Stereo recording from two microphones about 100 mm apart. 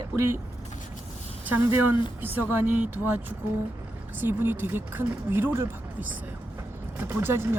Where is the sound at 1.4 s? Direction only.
20° right (ahead or behind).